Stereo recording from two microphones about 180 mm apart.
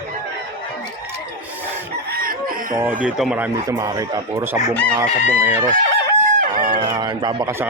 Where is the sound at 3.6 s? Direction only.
15° right (ahead or behind).